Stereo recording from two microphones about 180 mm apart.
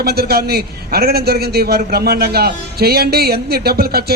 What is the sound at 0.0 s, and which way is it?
A man's voice, 60° right (ahead or behind).